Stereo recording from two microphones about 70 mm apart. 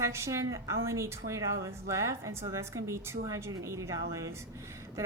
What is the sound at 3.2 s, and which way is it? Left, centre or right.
Speech, right.